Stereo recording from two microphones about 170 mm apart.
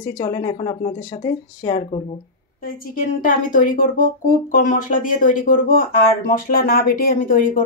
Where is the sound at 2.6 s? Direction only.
55° left (ahead or behind).